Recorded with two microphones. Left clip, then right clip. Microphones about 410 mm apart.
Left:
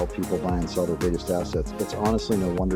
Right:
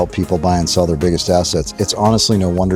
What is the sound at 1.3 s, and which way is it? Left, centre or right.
Speech, right.